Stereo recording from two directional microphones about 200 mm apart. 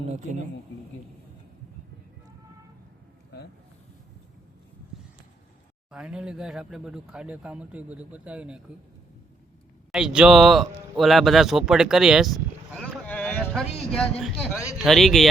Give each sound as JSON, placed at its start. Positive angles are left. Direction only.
{"t": 0.1, "sound": "speech", "side_deg": -35}
{"t": 5.9, "sound": "speech", "side_deg": -5}
{"t": 9.9, "sound": "speech", "side_deg": -5}